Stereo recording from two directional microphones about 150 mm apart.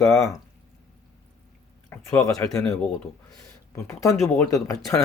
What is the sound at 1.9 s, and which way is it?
Speech, 20° left (ahead or behind).